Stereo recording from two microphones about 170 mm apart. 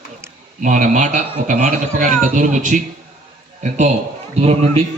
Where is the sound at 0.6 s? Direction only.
50° right (ahead or behind).